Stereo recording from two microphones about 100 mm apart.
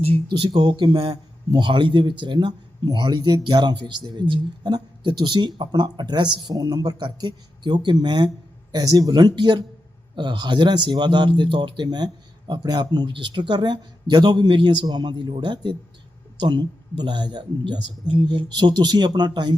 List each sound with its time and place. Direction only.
0.5 s speech: 50° right (ahead or behind)
1.1 s speech: 45° right (ahead or behind)